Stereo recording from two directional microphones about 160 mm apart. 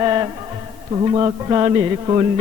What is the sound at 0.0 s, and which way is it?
Music, 25° right (ahead or behind).